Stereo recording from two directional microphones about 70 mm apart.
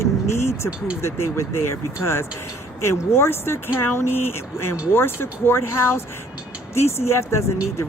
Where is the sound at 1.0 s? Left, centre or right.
Left.